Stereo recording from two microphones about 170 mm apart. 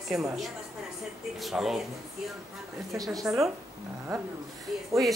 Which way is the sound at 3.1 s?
20° right (ahead or behind).